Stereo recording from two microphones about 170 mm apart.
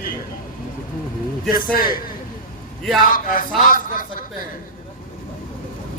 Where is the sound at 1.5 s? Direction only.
55° left (ahead or behind).